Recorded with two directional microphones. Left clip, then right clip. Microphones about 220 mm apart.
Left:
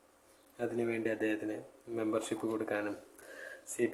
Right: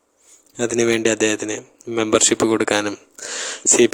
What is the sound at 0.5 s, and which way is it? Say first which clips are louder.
A man's voice: right 17 dB; 45° right (ahead or behind).